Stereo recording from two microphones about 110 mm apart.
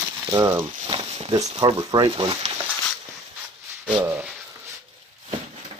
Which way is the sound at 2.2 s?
50° right (ahead or behind).